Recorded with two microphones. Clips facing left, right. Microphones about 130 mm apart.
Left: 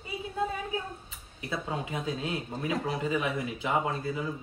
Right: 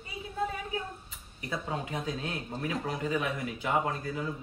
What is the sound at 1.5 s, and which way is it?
Speech, 10° left (ahead or behind).